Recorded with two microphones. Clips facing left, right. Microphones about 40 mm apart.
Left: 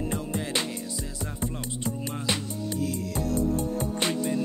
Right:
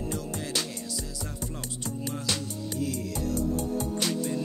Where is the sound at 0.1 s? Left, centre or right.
Left.